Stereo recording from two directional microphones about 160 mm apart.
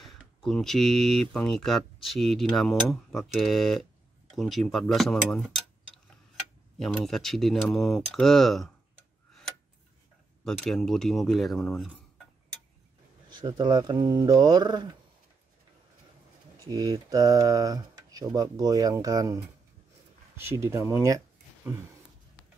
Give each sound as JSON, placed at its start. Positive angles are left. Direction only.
{"t": 0.0, "sound": "speech", "side_deg": 0}
{"t": 10.4, "sound": "speech", "side_deg": 5}
{"t": 13.3, "sound": "speech", "side_deg": -30}
{"t": 16.7, "sound": "speech", "side_deg": -25}